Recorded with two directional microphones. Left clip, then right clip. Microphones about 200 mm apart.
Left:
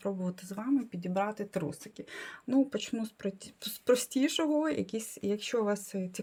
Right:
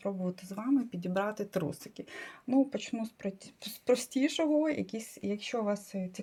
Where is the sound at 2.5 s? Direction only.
20° left (ahead or behind).